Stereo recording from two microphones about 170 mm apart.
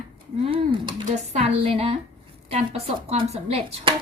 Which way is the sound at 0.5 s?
30° right (ahead or behind).